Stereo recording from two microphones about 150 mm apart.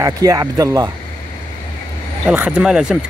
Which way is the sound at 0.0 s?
25° right (ahead or behind).